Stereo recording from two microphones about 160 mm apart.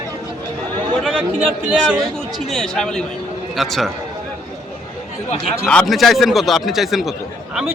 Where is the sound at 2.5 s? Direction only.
5° left (ahead or behind).